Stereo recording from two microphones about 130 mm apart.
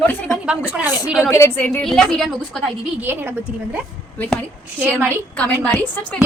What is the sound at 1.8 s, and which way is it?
Speech, centre (ahead or behind).